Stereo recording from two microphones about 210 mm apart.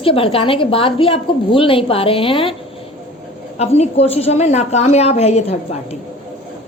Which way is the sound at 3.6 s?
30° left (ahead or behind).